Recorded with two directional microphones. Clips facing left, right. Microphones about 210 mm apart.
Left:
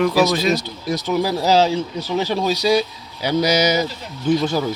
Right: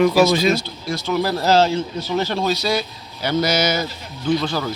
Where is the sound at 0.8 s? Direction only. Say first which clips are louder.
Left 1 dB; 20° left (ahead or behind).